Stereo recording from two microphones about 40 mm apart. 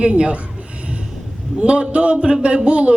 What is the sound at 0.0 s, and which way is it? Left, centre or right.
Speech, right.